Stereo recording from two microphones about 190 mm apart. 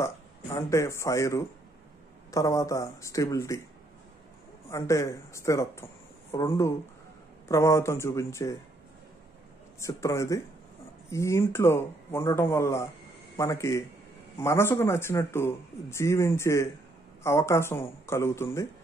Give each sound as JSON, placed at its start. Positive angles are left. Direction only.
{"t": 0.6, "sound": "a man's voice", "side_deg": 15}
{"t": 4.6, "sound": "a man's voice", "side_deg": 15}
{"t": 9.8, "sound": "a man's voice", "side_deg": 15}